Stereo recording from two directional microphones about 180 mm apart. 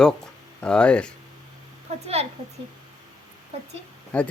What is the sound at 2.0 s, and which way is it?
Speech, 35° right (ahead or behind).